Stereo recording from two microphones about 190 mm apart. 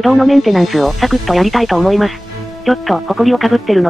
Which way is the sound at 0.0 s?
Centre (ahead or behind).